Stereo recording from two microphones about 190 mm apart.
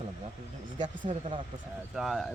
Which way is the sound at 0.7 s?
40° right (ahead or behind).